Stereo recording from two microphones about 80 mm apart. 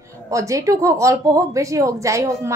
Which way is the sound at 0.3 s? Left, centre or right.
Right.